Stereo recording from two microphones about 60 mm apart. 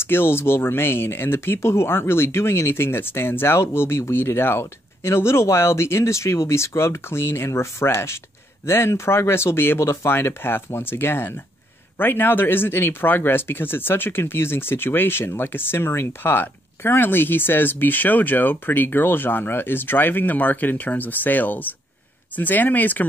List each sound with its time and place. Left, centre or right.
0.0 s speech: left